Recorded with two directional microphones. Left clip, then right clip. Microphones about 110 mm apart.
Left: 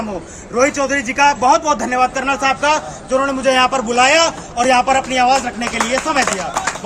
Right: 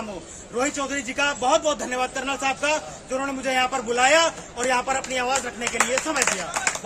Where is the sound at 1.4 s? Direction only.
90° right.